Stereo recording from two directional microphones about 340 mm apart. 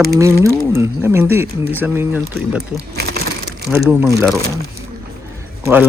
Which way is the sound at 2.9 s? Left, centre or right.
Right.